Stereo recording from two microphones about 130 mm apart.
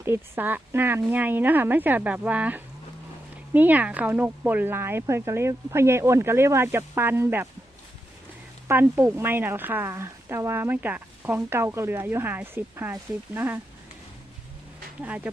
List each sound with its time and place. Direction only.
0.0 s speech: 15° right (ahead or behind)
8.6 s speech: 15° right (ahead or behind)
15.0 s speech: 10° right (ahead or behind)